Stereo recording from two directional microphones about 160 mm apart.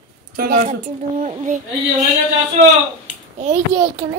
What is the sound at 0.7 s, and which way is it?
Speech, 45° right (ahead or behind).